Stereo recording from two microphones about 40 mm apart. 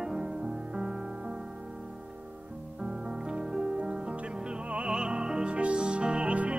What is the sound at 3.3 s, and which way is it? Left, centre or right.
Music, right.